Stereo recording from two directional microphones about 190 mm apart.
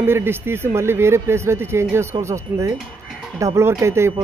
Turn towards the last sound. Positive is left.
turn(degrees=-15)  # may be behind; listen again after turning